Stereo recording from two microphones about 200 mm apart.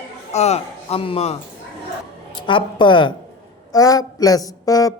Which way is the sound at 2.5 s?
25° left (ahead or behind).